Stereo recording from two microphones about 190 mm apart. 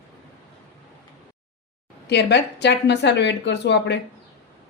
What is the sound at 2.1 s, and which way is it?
A woman's voice, 60° left (ahead or behind).